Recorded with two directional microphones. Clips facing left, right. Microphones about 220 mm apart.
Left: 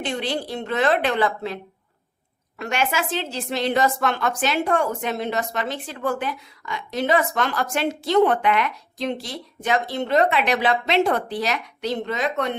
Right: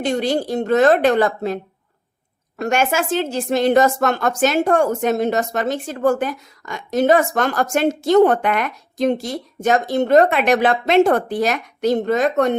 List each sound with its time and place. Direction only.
0.0 s a woman's voice: 45° right (ahead or behind)
2.6 s a woman's voice: 45° right (ahead or behind)